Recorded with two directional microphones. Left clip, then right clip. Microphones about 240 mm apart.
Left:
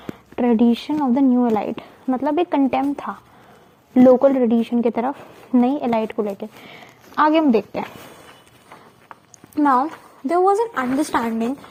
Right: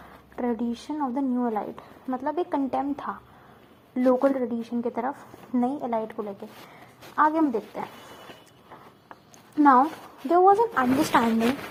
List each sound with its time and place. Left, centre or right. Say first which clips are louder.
0.3 s a woman's voice: left 11 dB; left
9.6 s speech: left 1 dB; left